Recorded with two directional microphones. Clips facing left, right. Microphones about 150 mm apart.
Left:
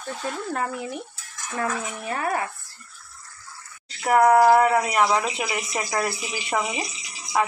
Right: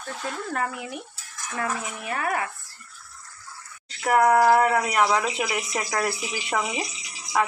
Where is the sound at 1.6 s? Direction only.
30° left (ahead or behind).